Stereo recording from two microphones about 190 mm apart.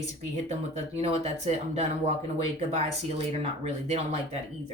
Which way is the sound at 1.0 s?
35° right (ahead or behind).